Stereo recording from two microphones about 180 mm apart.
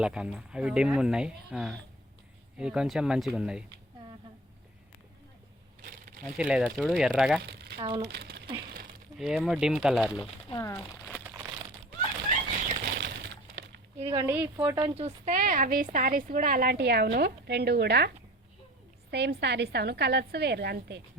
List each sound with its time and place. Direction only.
0.0 s speech: 5° right (ahead or behind)
6.3 s speech: 5° right (ahead or behind)
7.4 s crumpling: 65° right (ahead or behind)
7.8 s speech: 25° right (ahead or behind)
8.0 s speech: 65° right (ahead or behind)
8.6 s a sound: 55° right (ahead or behind)
9.1 s speech: centre (ahead or behind)
10.5 s speech: 15° left (ahead or behind)
12.6 s a sound: 60° right (ahead or behind); by 13.8 s 80° right
14.1 s speech: 15° right (ahead or behind)
14.9 s speech: 40° right (ahead or behind); by 18.1 s 65° right (ahead or behind)
19.1 s a woman's voice: 70° right (ahead or behind)